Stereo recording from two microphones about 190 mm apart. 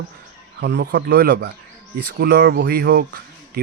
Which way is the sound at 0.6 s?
60° right (ahead or behind).